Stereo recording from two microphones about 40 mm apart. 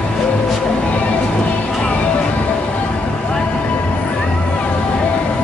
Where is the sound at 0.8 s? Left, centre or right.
Left.